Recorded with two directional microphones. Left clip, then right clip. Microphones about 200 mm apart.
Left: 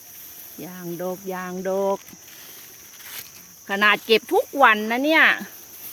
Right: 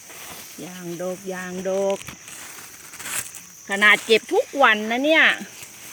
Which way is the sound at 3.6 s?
10° left (ahead or behind).